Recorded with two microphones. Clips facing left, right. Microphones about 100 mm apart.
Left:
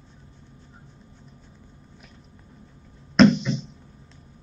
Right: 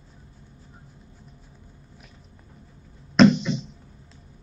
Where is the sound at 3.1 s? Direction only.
Centre (ahead or behind).